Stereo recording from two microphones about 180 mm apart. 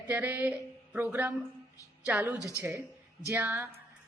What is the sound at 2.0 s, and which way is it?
Speech, 5° right (ahead or behind).